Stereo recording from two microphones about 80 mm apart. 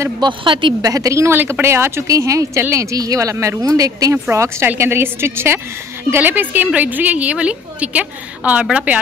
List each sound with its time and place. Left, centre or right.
0.2 s a woman's voice: right
0.8 s a woman's voice: right
4.1 s a woman's voice: right; by 8.6 s centre